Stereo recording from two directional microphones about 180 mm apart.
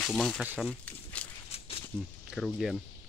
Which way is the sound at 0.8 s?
5° left (ahead or behind).